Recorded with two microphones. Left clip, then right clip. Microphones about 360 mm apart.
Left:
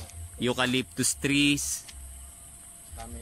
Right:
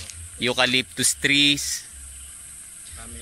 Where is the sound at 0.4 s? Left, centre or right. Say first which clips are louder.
Right 7 dB; centre.